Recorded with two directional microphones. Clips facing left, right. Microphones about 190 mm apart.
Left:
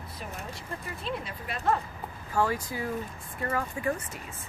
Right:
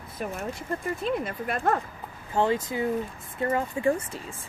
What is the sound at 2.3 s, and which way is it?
Speech, 25° right (ahead or behind).